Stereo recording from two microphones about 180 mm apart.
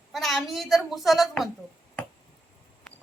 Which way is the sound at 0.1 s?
Centre (ahead or behind).